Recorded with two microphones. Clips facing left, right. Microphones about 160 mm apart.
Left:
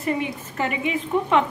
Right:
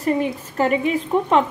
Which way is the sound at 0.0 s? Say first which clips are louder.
Right 5 dB; 35° right (ahead or behind).